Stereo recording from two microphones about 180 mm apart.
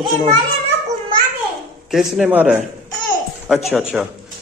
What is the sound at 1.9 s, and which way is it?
A man's voice, centre (ahead or behind).